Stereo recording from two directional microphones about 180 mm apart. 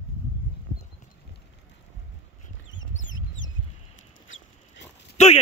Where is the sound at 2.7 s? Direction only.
90° left.